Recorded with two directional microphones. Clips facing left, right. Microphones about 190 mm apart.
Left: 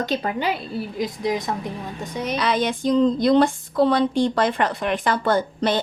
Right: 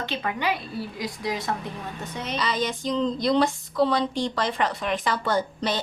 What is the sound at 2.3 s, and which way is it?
Speech, 60° left (ahead or behind).